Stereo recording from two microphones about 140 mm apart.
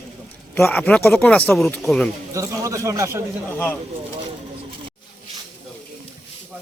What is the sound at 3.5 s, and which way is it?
Speech, 10° left (ahead or behind).